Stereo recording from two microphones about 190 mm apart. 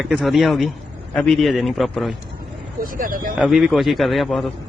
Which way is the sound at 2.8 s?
45° right (ahead or behind).